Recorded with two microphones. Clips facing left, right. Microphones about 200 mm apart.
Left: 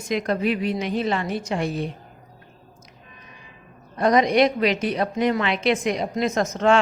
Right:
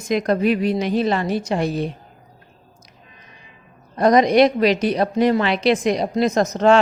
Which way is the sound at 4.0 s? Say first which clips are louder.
Right 4 dB; 40° right (ahead or behind).